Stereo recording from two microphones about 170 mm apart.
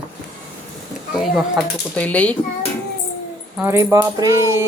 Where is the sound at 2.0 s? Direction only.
10° left (ahead or behind).